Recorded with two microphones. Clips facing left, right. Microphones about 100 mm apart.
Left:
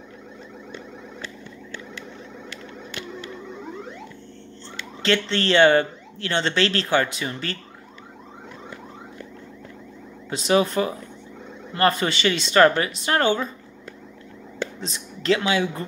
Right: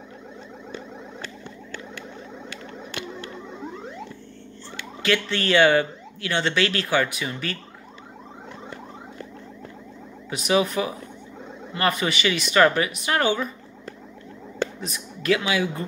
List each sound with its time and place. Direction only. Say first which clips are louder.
5.0 s speech: left 2 dB; 30° left (ahead or behind)
10.3 s speech: left 2 dB; 30° left (ahead or behind)
14.8 s speech: even; 30° left (ahead or behind)